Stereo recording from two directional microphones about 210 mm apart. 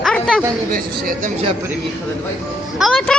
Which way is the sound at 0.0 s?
5° left (ahead or behind).